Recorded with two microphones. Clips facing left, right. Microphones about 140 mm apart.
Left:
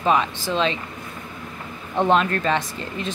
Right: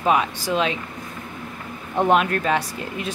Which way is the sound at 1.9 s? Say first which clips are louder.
Even; 10° right (ahead or behind).